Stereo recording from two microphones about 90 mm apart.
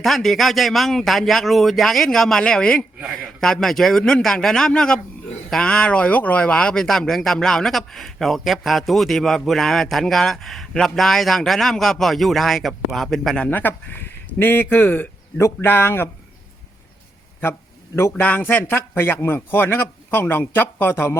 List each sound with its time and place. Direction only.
0.0 s speech: centre (ahead or behind)
13.5 s a man's voice: 20° left (ahead or behind)
18.2 s a man's voice: 20° left (ahead or behind)